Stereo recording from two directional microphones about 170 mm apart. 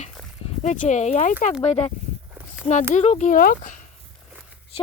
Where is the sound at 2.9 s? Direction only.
40° left (ahead or behind).